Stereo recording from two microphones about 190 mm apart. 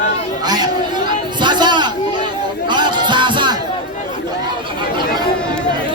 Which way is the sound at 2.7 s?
25° right (ahead or behind).